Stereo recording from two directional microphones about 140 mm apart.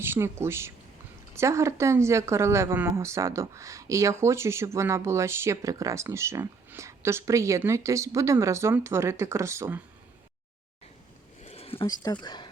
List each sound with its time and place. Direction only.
0.0 s speech: 15° right (ahead or behind)
11.4 s a sound: 45° left (ahead or behind)
12.2 s speech: 35° left (ahead or behind)